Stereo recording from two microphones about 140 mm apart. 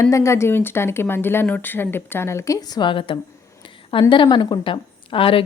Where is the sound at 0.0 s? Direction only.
20° left (ahead or behind).